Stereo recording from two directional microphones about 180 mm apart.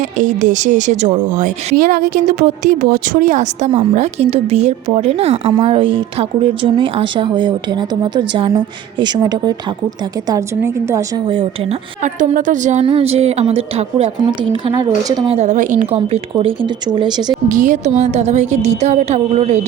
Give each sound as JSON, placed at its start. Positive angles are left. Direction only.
{"t": 0.2, "sound": "a woman's voice", "side_deg": -45}
{"t": 11.3, "sound": "speech", "side_deg": -30}
{"t": 12.0, "sound": "a woman's voice", "side_deg": -45}
{"t": 15.4, "sound": "a woman's voice", "side_deg": -45}
{"t": 16.0, "sound": "speech", "side_deg": -30}
{"t": 17.5, "sound": "a woman's voice", "side_deg": -45}